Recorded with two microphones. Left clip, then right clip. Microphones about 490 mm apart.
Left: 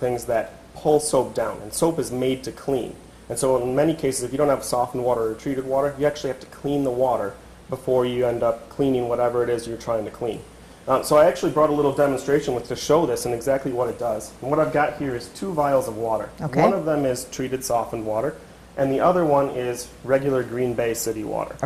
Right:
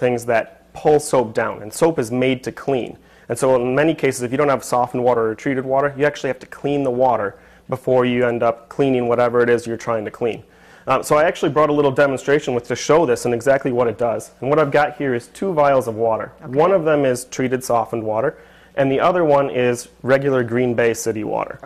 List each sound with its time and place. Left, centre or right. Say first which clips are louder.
0.0 s speech: right 5 dB; right
16.8 s speech: right 6 dB; right
18.8 s speech: right 3 dB; right